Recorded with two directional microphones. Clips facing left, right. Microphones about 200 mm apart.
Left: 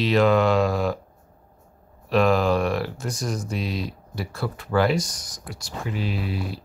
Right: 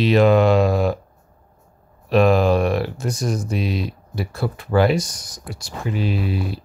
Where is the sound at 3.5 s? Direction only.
60° right (ahead or behind).